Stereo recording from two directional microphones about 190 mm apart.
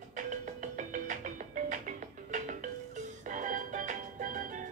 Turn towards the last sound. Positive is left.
turn(degrees=-45)  # may be behind; listen again after turning